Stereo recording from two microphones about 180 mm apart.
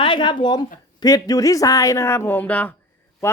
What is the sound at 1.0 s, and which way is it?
Speech, 20° left (ahead or behind).